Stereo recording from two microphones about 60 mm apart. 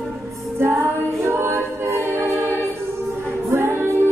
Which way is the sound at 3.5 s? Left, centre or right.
Right.